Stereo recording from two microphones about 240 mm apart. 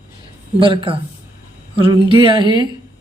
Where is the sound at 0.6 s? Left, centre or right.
Right.